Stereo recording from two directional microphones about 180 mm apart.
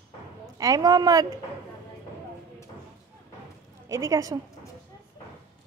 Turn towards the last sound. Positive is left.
turn(degrees=-20)  # may be behind; listen again after turning